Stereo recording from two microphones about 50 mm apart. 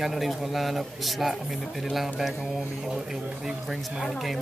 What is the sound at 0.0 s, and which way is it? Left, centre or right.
A man's voice, centre.